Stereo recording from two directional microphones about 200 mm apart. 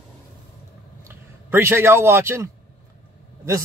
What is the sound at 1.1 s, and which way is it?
A man's voice, 10° right (ahead or behind).